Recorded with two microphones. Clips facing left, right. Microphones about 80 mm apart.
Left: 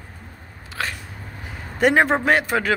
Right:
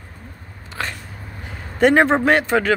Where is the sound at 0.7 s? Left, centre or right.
Centre.